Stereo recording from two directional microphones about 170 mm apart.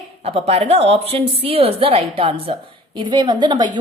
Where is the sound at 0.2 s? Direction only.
35° right (ahead or behind).